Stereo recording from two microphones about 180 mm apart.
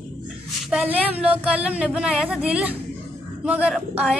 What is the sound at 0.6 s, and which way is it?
A woman's voice, 5° right (ahead or behind).